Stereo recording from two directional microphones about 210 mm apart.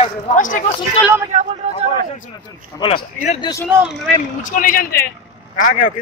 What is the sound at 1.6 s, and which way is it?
Speech, 35° right (ahead or behind).